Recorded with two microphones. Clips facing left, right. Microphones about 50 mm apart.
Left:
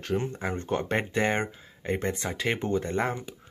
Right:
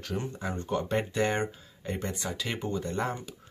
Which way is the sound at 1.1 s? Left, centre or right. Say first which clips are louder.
Left 2 dB; left.